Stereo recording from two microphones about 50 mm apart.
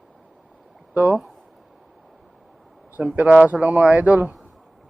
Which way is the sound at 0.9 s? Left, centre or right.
Right.